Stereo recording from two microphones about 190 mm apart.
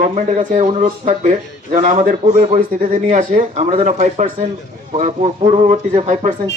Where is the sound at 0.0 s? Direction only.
40° right (ahead or behind).